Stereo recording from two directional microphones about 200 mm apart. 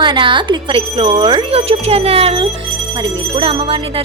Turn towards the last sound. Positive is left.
turn(degrees=-25)  # may be behind; listen again after turning